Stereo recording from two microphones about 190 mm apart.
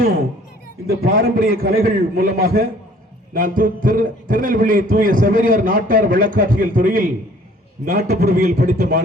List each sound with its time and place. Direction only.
0.9 s a man's voice: 55° right (ahead or behind)